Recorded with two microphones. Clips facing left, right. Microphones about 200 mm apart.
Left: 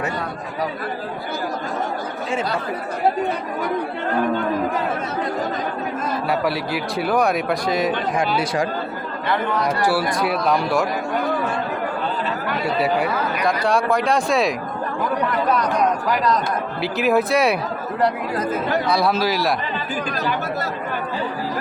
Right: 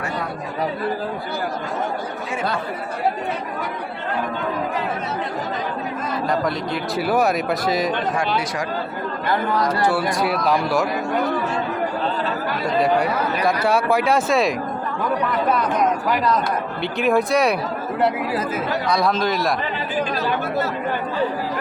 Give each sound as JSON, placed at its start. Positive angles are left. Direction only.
{"t": 6.9, "sound": "speech", "side_deg": -5}
{"t": 9.3, "sound": "speech", "side_deg": -35}
{"t": 9.8, "sound": "speech", "side_deg": 5}
{"t": 12.8, "sound": "speech", "side_deg": 0}
{"t": 16.8, "sound": "speech", "side_deg": 5}